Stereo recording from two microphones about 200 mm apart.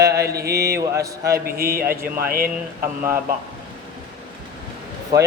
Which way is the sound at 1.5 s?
50° right (ahead or behind).